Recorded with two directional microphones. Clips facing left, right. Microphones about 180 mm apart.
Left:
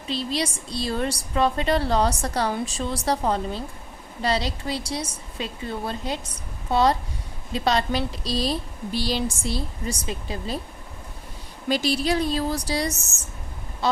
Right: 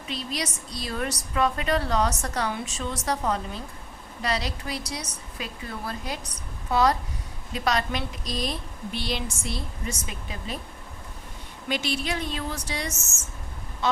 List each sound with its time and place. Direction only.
0.1 s a woman's voice: 30° left (ahead or behind)
11.7 s a woman's voice: 35° left (ahead or behind)
13.8 s quack: 35° left (ahead or behind)